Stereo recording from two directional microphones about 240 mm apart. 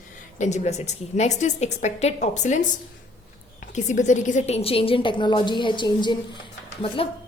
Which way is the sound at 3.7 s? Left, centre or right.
Left.